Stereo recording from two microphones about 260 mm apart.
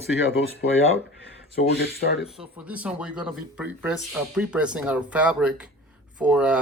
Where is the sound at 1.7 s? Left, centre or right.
Left.